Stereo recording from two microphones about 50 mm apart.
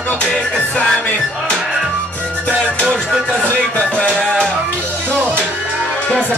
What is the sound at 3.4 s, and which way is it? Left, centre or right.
Music, left.